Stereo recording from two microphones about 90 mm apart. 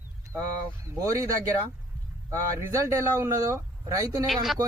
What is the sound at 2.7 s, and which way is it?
Speech, 35° right (ahead or behind).